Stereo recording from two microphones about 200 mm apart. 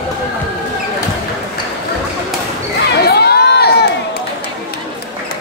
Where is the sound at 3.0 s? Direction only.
55° left (ahead or behind).